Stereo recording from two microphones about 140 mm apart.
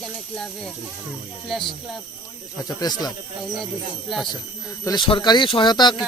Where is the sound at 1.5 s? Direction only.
Centre (ahead or behind).